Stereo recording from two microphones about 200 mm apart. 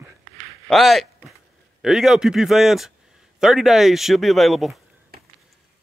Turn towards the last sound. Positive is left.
turn(degrees=0)  # may be behind; listen again after turning